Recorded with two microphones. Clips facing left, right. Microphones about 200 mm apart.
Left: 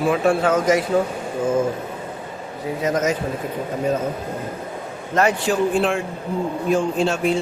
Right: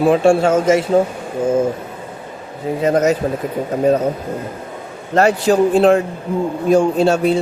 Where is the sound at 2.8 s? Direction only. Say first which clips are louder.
Right 6 dB; 35° right (ahead or behind).